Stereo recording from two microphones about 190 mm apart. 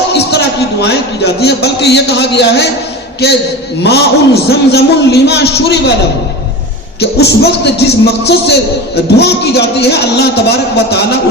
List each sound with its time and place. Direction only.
0.1 s a man's voice: 60° left (ahead or behind)
7.0 s a man's voice: 60° left (ahead or behind)